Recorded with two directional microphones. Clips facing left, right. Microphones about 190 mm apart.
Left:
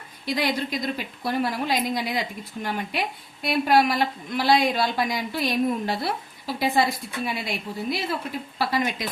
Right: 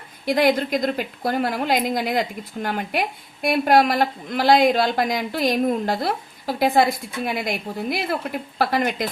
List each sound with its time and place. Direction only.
0.3 s a woman's voice: 50° right (ahead or behind)